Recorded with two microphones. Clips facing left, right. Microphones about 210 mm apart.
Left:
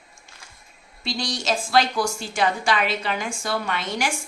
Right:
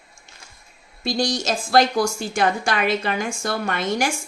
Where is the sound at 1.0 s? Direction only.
45° right (ahead or behind).